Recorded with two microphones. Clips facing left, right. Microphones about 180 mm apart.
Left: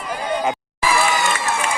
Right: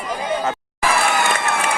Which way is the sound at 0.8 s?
60° right (ahead or behind).